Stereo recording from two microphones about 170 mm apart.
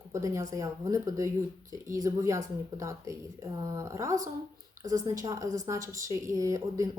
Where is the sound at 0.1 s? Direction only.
20° right (ahead or behind).